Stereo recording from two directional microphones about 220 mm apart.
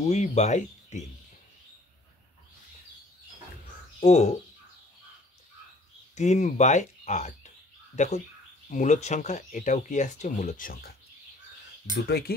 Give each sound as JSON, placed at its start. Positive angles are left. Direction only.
{"t": 0.0, "sound": "speech", "side_deg": 30}
{"t": 4.0, "sound": "speech", "side_deg": 30}
{"t": 6.1, "sound": "speech", "side_deg": 30}
{"t": 12.1, "sound": "speech", "side_deg": 50}